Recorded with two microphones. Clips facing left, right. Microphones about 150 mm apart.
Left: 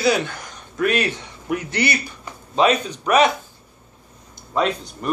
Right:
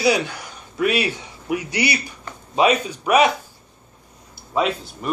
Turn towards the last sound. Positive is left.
turn(degrees=-5)  # may be behind; listen again after turning